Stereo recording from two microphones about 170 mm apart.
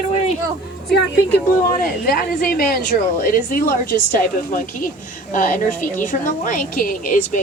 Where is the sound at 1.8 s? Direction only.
60° left (ahead or behind).